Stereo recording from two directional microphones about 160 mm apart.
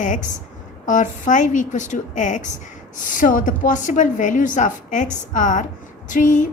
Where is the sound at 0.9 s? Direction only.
55° left (ahead or behind).